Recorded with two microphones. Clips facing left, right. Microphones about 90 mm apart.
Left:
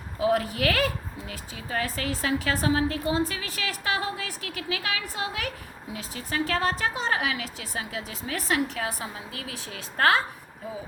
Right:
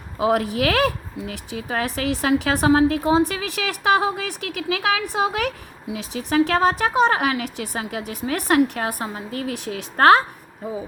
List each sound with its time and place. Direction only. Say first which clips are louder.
0.2 s speech: right 4 dB; 80° right
5.9 s speech: right 10 dB; 90° right; by 9.6 s 55° right (ahead or behind)